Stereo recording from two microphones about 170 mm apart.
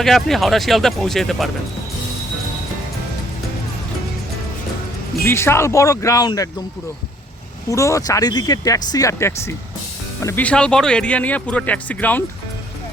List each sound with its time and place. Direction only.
0.0 s speech: centre (ahead or behind)
5.2 s speech: 15° left (ahead or behind)
7.7 s speech: 20° left (ahead or behind)